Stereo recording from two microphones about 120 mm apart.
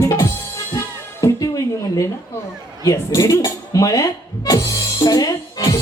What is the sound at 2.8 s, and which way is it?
Speech, 30° left (ahead or behind).